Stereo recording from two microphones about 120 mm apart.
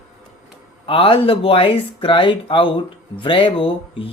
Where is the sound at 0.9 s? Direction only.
50° left (ahead or behind).